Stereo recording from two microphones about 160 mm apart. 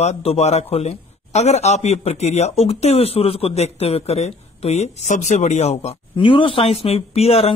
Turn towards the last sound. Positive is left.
turn(degrees=40)  # may be behind; listen again after turning